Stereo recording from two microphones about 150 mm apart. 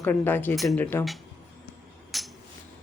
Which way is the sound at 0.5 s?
Centre (ahead or behind).